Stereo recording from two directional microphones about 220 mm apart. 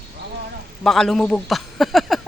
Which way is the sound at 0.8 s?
Centre (ahead or behind).